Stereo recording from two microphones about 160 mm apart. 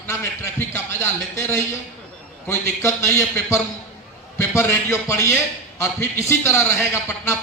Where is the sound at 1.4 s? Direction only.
15° left (ahead or behind).